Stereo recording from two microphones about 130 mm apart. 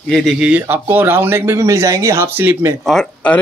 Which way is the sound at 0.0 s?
Centre (ahead or behind).